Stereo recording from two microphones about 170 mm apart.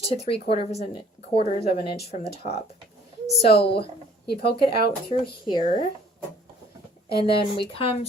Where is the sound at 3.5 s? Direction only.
75° left (ahead or behind).